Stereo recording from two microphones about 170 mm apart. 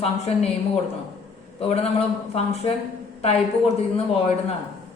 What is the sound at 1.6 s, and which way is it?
Speech, 40° left (ahead or behind).